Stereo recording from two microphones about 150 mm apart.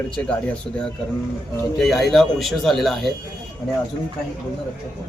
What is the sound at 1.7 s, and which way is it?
Speech, centre (ahead or behind).